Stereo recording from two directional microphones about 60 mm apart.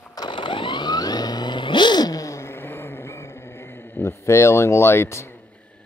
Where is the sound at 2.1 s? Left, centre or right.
Left.